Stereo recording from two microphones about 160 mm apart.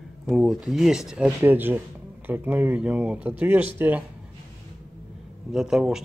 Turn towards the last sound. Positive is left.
turn(degrees=-5)  # may be behind; listen again after turning